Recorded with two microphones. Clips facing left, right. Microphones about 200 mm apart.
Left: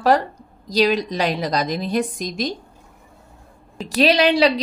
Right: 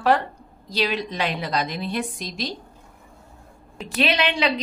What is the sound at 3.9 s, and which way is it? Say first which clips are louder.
Speech: left 7 dB; 35° left (ahead or behind).